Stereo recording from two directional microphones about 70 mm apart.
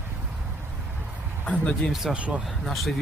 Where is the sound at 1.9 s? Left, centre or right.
Centre.